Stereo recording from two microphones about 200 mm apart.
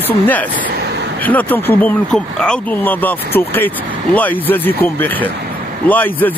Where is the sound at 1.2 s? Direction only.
10° left (ahead or behind).